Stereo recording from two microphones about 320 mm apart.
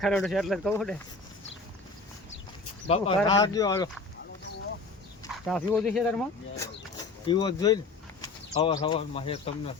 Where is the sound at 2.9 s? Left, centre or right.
Centre.